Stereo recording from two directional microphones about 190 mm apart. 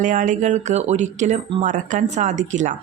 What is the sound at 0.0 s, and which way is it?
A woman's voice, 40° right (ahead or behind).